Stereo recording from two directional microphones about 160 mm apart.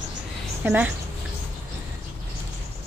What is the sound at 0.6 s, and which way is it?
Speech, 10° right (ahead or behind).